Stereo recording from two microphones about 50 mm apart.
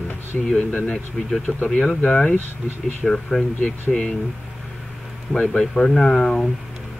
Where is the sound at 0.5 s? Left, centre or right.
Left.